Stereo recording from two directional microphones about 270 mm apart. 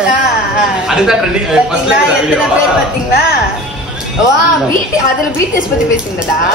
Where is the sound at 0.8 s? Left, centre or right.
Centre.